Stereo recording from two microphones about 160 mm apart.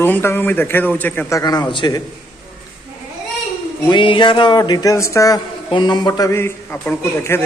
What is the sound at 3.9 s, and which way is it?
A man's voice, 30° left (ahead or behind).